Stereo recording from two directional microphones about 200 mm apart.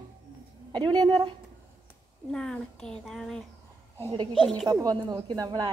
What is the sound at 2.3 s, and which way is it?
A child's voice, 5° left (ahead or behind).